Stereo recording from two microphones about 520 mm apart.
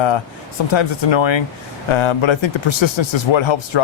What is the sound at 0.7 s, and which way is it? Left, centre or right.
Speech, left.